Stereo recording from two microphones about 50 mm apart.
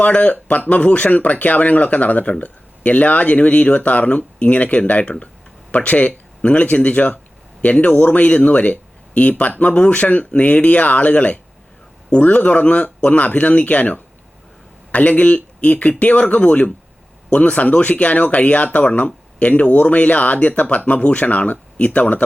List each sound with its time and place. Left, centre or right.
0.0 s speech: left